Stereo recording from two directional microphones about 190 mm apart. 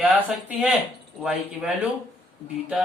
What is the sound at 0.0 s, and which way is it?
Speech, 10° right (ahead or behind).